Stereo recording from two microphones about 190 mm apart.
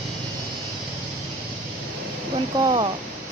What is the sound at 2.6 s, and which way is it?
Speech, 25° right (ahead or behind).